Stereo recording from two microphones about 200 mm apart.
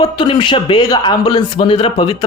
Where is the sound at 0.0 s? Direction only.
25° left (ahead or behind).